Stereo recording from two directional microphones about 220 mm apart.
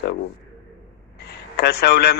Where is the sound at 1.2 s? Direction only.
45° left (ahead or behind).